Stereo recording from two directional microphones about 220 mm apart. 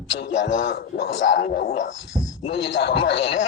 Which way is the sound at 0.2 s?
55° left (ahead or behind).